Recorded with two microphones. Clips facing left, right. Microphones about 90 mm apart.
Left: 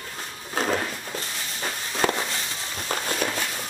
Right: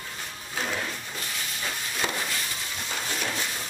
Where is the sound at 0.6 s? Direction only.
45° left (ahead or behind).